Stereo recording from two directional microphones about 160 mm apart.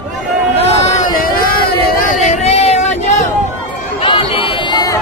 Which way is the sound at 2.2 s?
45° left (ahead or behind).